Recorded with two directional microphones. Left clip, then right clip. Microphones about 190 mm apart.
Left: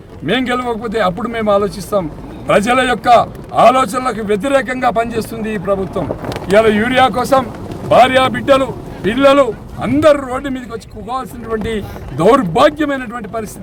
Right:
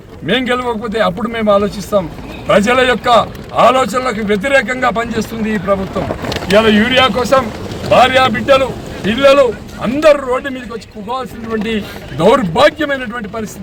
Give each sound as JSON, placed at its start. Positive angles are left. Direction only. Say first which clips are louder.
{"t": 0.3, "sound": "a man's voice", "louder": "right 1 dB", "side_deg": 15}